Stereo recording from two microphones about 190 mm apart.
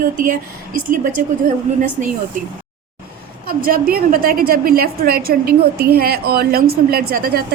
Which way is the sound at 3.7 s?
50° right (ahead or behind).